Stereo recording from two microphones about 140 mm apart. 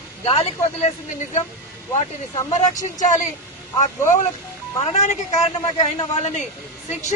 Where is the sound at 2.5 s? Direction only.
55° left (ahead or behind).